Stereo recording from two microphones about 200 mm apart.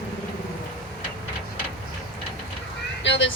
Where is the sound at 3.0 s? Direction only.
60° left (ahead or behind).